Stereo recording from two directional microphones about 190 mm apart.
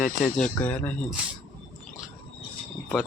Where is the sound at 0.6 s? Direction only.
5° left (ahead or behind).